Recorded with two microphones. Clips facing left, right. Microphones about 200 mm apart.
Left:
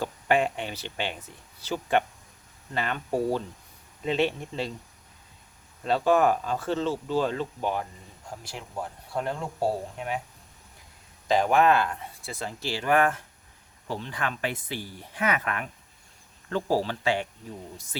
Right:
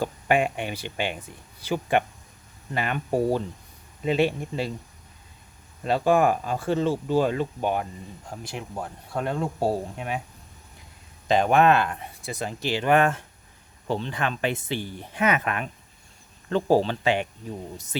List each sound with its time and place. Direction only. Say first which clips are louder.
0.0 s speech: right 2 dB; 15° right (ahead or behind)
5.8 s speech: right 1 dB; 10° right (ahead or behind)
9.2 s speech: right 4 dB; 25° right (ahead or behind)
11.3 s speech: right 2 dB; 20° right (ahead or behind)